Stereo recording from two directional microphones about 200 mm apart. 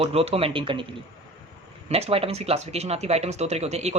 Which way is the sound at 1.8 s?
30° right (ahead or behind).